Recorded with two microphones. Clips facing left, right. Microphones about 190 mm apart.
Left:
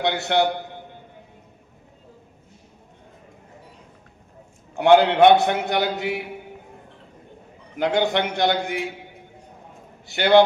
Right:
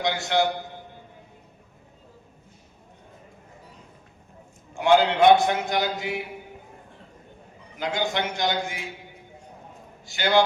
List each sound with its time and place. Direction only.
0.0 s a man's voice: 65° left (ahead or behind)
4.7 s a man's voice: 60° left (ahead or behind)
7.8 s a man's voice: 60° left (ahead or behind)
10.1 s a man's voice: 60° left (ahead or behind)